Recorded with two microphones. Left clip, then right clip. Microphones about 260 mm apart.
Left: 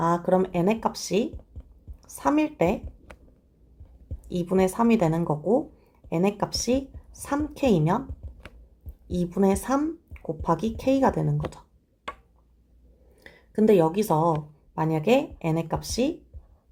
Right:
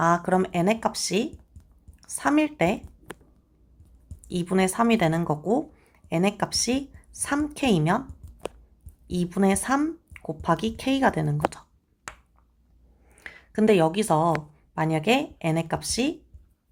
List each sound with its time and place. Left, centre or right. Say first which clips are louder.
0.0 s a woman's voice: right 1 dB; right
4.3 s a woman's voice: left 1 dB; right
5.3 s speech: left 1 dB; right
6.1 s a woman's voice: even; right
9.0 s a woman's voice: even; right
13.2 s a woman's voice: even; centre